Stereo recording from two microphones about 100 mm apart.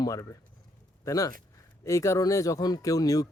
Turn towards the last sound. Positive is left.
turn(degrees=35)  # may be behind; listen again after turning